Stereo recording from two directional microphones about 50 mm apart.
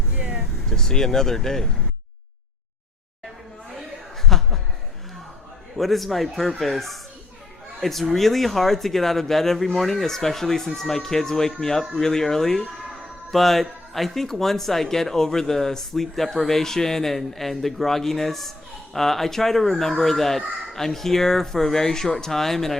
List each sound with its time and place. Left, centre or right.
0.2 s vehicle: right
0.7 s speech: centre
4.3 s a sound: centre
5.7 s speech: centre